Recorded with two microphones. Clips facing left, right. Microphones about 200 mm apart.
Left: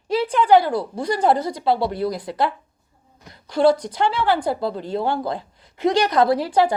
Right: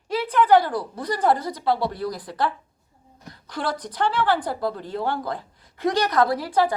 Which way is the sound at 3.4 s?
25° left (ahead or behind).